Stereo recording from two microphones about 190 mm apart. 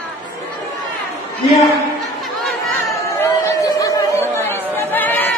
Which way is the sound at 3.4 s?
15° left (ahead or behind).